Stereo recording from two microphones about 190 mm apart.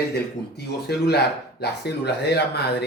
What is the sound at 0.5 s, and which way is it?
Speech, 60° left (ahead or behind).